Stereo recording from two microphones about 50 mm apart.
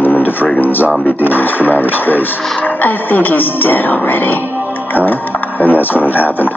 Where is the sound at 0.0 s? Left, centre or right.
Left.